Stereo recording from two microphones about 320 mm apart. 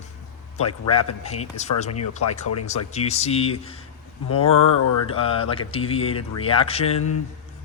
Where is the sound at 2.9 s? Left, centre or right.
Centre.